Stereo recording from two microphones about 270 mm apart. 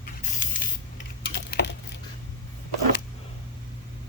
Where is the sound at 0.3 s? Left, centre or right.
Left.